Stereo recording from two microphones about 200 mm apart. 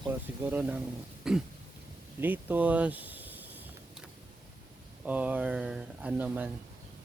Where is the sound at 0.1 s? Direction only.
10° right (ahead or behind).